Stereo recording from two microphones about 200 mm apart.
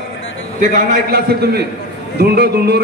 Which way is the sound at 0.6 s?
45° right (ahead or behind).